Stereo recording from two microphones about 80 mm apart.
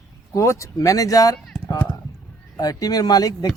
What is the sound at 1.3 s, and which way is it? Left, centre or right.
Speech, centre.